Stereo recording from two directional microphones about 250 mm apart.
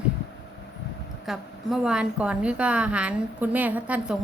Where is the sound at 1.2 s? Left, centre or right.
Centre.